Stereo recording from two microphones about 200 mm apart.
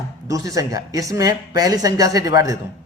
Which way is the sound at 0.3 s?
15° right (ahead or behind).